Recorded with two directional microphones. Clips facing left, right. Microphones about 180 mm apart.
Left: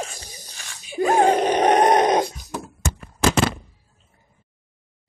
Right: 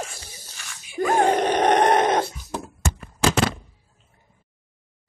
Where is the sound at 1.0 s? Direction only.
15° left (ahead or behind).